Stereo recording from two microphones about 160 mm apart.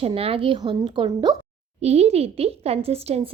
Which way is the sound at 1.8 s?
40° right (ahead or behind).